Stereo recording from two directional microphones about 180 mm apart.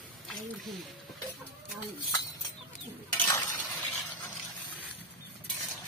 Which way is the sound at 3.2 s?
15° left (ahead or behind).